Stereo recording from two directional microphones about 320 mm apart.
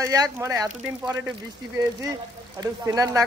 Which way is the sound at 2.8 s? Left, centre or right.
Centre.